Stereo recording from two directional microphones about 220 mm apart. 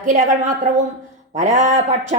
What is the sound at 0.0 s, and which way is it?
A woman's voice, 35° right (ahead or behind).